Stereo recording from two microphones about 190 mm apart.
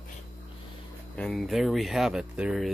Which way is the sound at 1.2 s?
Centre (ahead or behind).